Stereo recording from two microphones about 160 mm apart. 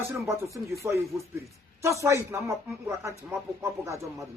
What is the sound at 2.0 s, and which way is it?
Speech, 15° right (ahead or behind).